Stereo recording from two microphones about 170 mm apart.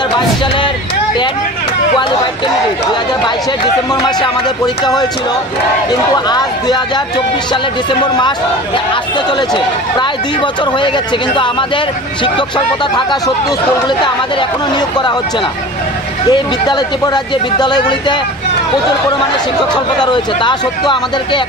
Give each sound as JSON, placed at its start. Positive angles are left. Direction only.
{"t": 5.9, "sound": "speech", "side_deg": 25}
{"t": 7.9, "sound": "speech", "side_deg": 25}
{"t": 9.5, "sound": "speech", "side_deg": 25}
{"t": 16.3, "sound": "speech", "side_deg": 25}
{"t": 19.7, "sound": "speech", "side_deg": 25}